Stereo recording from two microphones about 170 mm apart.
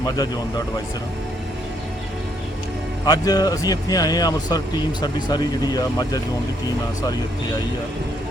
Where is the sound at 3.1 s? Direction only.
25° left (ahead or behind).